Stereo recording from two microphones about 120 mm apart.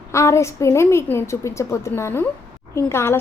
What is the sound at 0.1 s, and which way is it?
A woman's voice, 25° left (ahead or behind).